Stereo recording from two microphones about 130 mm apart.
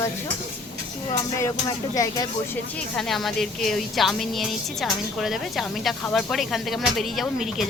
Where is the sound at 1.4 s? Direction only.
25° left (ahead or behind).